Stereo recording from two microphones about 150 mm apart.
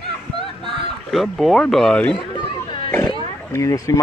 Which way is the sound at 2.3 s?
30° left (ahead or behind).